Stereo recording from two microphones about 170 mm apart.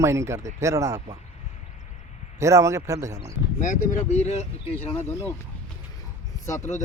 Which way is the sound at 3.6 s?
50° left (ahead or behind).